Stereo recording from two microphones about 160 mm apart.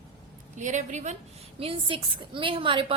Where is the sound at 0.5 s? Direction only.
50° right (ahead or behind).